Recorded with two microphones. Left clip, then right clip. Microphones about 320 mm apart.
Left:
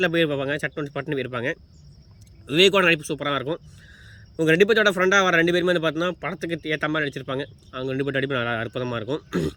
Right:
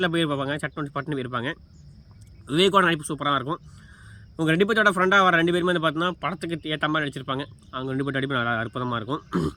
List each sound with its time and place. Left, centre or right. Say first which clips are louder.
0.0 s speech: left 3 dB; right
2.5 s speech: left 2 dB; right
4.4 s speech: left 3 dB; right
6.0 s speech: even; centre
6.8 s speech: even; right
9.0 s speech: left 1 dB; centre